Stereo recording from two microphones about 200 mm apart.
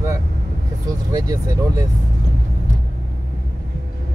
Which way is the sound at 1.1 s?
20° right (ahead or behind).